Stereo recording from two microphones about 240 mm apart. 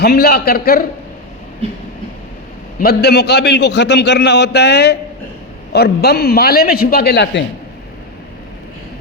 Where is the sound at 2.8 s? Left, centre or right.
Left.